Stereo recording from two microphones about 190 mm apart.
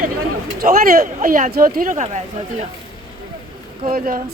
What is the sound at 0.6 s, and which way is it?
Speech, 50° right (ahead or behind).